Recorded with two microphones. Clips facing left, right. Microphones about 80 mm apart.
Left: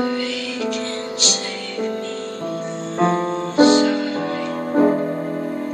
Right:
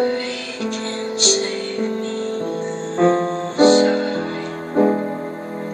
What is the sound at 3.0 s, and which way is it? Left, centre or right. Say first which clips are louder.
Music: right 2 dB; right.